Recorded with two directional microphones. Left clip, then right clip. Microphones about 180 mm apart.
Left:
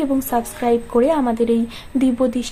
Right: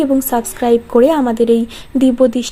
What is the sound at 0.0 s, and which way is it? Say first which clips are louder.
Speech: right 5 dB; 35° right (ahead or behind).